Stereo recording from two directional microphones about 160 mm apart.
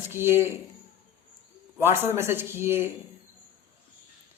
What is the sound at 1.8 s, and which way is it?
Mantra, 15° right (ahead or behind).